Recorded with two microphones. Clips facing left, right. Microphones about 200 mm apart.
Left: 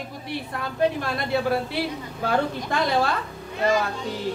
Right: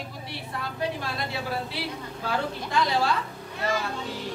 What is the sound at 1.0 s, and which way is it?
A woman's voice, 50° left (ahead or behind).